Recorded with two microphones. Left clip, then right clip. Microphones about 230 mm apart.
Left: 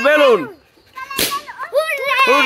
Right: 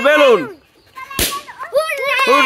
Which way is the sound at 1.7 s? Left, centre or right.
Centre.